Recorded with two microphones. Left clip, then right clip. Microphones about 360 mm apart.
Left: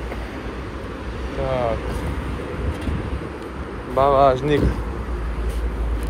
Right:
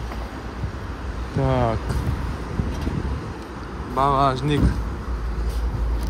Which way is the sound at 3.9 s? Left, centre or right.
Centre.